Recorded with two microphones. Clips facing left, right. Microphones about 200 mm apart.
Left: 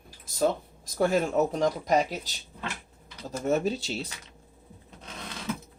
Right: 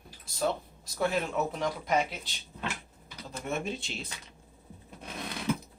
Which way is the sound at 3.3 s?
40° left (ahead or behind).